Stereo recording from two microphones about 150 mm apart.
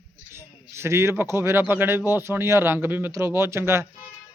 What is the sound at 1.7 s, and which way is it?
A man's voice, 15° right (ahead or behind).